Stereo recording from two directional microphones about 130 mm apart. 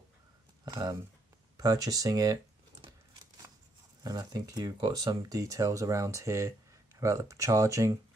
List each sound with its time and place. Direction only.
0.7 s speech: 35° right (ahead or behind)
4.0 s speech: 30° right (ahead or behind)